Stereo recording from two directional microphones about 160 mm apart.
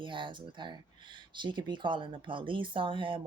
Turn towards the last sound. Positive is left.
turn(degrees=-30)  # may be behind; listen again after turning